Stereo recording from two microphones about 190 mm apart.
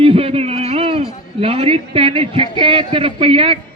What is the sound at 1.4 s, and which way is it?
A man's voice, 30° right (ahead or behind).